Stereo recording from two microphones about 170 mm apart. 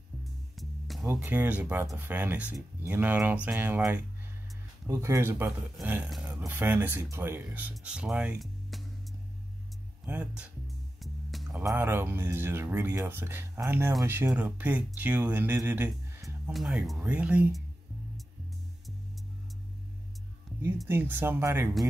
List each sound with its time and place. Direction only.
0.2 s music: centre (ahead or behind)
1.0 s speech: 10° right (ahead or behind)
10.0 s speech: 5° right (ahead or behind)
11.0 s music: centre (ahead or behind)
11.6 s speech: 15° right (ahead or behind)
16.4 s speech: 5° right (ahead or behind)
20.8 s speech: 10° right (ahead or behind)